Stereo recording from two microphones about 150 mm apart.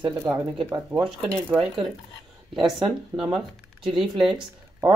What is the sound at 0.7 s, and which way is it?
Speech, 20° right (ahead or behind).